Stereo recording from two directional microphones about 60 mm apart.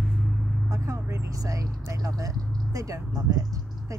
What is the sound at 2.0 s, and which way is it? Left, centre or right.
Speech, right.